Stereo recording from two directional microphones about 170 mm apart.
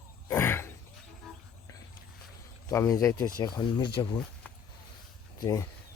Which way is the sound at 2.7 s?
20° left (ahead or behind).